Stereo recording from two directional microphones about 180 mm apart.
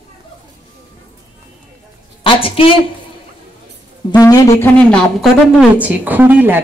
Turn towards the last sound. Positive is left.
turn(degrees=-10)  # may be behind; listen again after turning